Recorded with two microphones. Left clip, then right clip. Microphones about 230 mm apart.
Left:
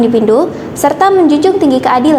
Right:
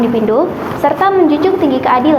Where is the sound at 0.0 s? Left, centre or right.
Left.